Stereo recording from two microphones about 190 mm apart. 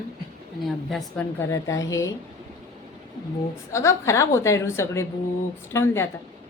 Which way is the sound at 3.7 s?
15° left (ahead or behind).